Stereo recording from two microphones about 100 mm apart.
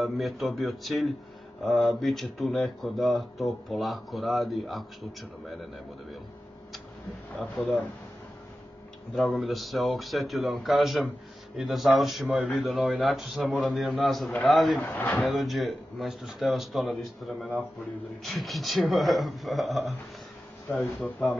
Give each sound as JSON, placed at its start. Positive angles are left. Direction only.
{"t": 0.0, "sound": "speech", "side_deg": 0}
{"t": 7.5, "sound": "speech", "side_deg": 15}
{"t": 9.1, "sound": "speech", "side_deg": 0}
{"t": 14.8, "sound": "a man's voice", "side_deg": 20}
{"t": 15.1, "sound": "speech", "side_deg": 0}